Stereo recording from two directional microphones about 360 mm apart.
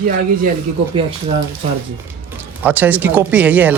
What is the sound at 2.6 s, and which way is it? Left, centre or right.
Speech, centre.